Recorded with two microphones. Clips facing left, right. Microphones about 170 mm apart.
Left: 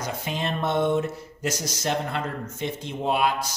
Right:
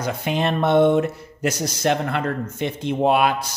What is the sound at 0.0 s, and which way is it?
Speech, 65° right (ahead or behind).